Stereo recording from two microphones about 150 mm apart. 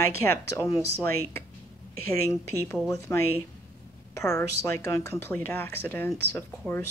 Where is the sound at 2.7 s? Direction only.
20° left (ahead or behind).